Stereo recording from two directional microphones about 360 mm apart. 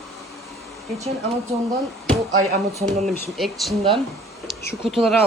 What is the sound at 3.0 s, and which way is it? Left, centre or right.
Speech, centre.